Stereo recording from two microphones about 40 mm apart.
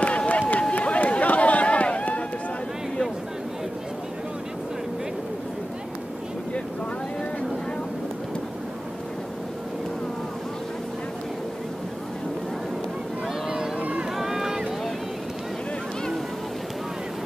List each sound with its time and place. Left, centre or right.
0.3 s run: left
13.7 s a sound: right
14.1 s boat: centre